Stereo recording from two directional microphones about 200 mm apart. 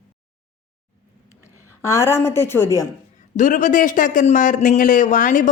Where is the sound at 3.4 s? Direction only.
40° left (ahead or behind).